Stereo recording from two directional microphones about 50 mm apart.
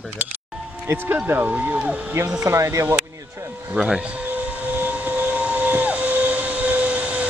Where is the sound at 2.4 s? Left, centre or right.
Right.